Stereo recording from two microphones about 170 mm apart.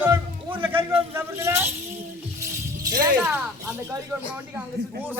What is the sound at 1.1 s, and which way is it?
Vehicle, 15° right (ahead or behind).